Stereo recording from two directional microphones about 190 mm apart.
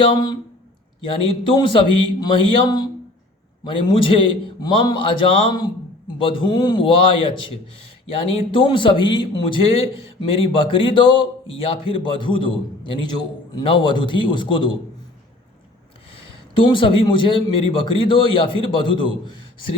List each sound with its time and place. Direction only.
0.0 s a man's voice: 20° left (ahead or behind)
16.6 s a man's voice: 25° left (ahead or behind)